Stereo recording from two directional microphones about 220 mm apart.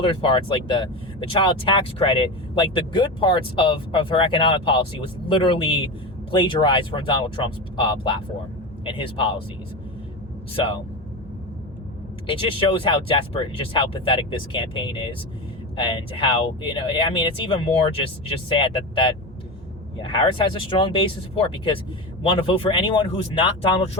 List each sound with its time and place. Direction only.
0.0 s speech: 25° left (ahead or behind)
10.5 s speech: 25° left (ahead or behind)
12.2 s speech: 25° left (ahead or behind)